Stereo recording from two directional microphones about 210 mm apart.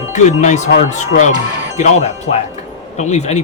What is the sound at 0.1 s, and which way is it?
A man's voice, 35° left (ahead or behind).